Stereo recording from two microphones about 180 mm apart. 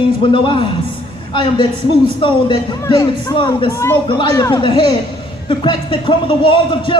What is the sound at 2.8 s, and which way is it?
Speech, 20° left (ahead or behind).